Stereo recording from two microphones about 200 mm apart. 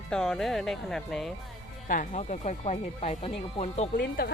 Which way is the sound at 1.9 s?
40° left (ahead or behind).